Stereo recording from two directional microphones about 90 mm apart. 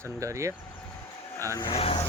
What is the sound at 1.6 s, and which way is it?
Speech, 90° left.